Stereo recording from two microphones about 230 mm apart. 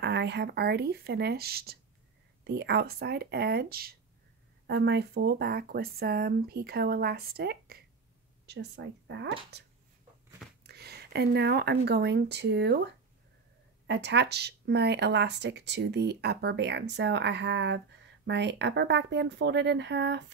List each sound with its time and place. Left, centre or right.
0.0 s speech: right